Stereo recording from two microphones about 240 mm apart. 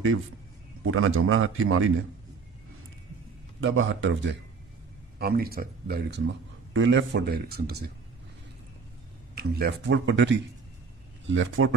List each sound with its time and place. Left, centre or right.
0.8 s a man's voice: right
3.6 s speech: right
9.3 s a man's voice: right